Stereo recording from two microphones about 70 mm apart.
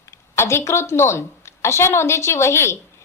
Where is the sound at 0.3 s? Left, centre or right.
Left.